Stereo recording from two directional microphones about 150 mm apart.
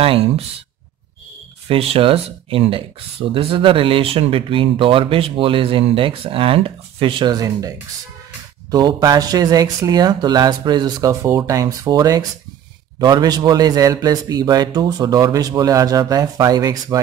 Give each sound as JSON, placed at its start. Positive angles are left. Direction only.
{"t": 0.0, "sound": "speech", "side_deg": -40}
{"t": 1.7, "sound": "a man's voice", "side_deg": -40}